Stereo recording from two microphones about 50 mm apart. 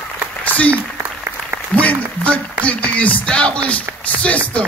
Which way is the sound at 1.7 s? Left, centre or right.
Left.